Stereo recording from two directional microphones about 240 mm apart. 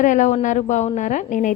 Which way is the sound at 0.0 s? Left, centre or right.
Left.